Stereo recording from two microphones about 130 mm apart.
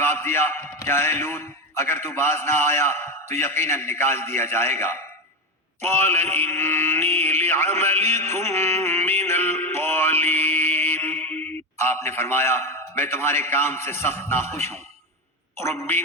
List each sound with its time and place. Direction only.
0.0 s a man's voice: 20° left (ahead or behind)
5.8 s mantra: 15° left (ahead or behind)
15.5 s a man's voice: 20° left (ahead or behind)